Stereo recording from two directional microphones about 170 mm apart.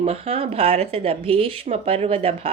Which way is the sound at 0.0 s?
35° right (ahead or behind).